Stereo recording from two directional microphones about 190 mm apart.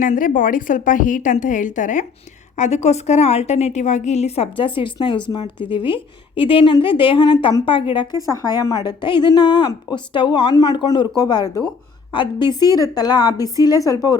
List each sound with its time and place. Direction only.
0.0 s a woman's voice: 45° left (ahead or behind); by 14.2 s 20° left (ahead or behind)